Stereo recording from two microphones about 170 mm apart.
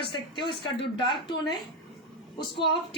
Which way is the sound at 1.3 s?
25° left (ahead or behind).